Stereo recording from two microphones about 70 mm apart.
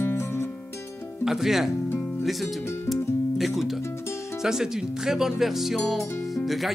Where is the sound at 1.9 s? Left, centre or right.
Left.